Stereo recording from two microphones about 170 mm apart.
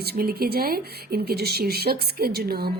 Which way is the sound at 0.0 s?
65° right (ahead or behind).